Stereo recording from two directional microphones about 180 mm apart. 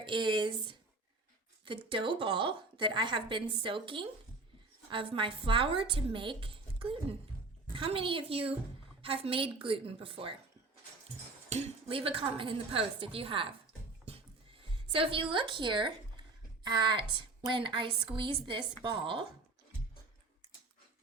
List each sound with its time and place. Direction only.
0.0 s a woman's voice: 25° right (ahead or behind)
11.4 s speech: 40° right (ahead or behind)
14.0 s music: 30° right (ahead or behind)
16.6 s a woman's voice: 25° right (ahead or behind)